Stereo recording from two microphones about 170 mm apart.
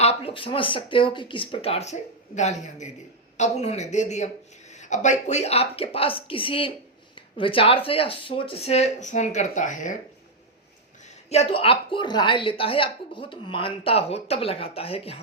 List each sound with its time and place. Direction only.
0.0 s a woman's voice: 35° left (ahead or behind)
11.3 s a woman's voice: 35° left (ahead or behind)